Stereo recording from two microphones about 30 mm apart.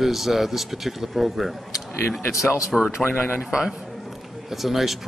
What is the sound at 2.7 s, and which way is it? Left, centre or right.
Speech, centre.